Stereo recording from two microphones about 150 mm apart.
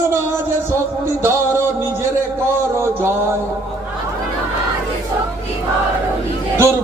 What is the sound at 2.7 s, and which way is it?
Music, 15° right (ahead or behind).